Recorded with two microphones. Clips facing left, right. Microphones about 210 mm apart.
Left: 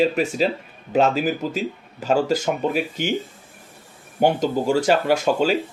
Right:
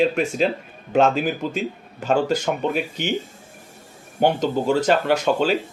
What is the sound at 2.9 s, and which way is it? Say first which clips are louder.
Speech: left 1 dB; 45° left (ahead or behind).